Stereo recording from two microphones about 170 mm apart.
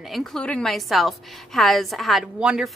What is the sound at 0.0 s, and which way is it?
A woman's voice, centre (ahead or behind).